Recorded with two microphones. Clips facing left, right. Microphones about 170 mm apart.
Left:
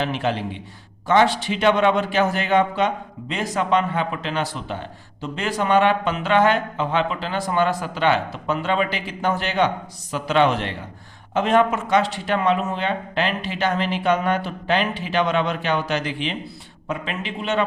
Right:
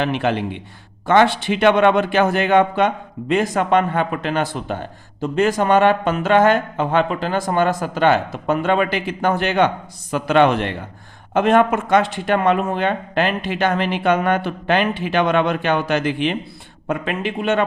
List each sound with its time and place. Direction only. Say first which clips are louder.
0.0 s a man's voice: right 4 dB; 60° right (ahead or behind)